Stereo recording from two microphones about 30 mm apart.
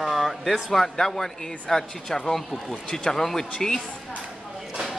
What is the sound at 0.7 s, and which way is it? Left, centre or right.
Speech, centre.